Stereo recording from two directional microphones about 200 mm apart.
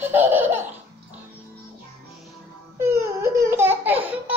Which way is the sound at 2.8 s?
15° right (ahead or behind).